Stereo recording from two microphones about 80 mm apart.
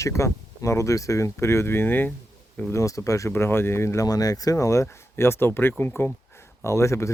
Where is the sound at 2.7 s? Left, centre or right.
Left.